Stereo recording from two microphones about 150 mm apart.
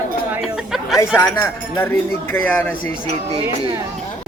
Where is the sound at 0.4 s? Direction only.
Centre (ahead or behind).